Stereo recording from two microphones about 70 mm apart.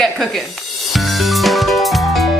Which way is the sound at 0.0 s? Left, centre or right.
Centre.